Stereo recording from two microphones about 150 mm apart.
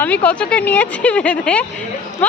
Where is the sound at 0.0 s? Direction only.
10° left (ahead or behind).